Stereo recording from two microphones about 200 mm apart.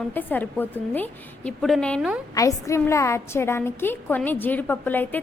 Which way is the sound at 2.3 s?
15° left (ahead or behind).